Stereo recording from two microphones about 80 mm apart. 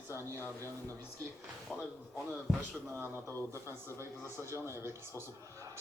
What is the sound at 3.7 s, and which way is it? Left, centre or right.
Speech, left.